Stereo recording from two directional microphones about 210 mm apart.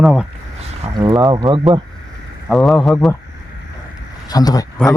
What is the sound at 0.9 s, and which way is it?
Speech, 20° right (ahead or behind).